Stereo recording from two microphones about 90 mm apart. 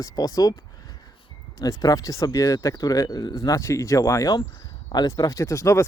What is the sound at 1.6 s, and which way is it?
Speech, 40° left (ahead or behind).